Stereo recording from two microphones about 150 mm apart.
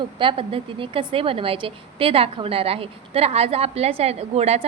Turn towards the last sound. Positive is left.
turn(degrees=-45)  # may be behind; listen again after turning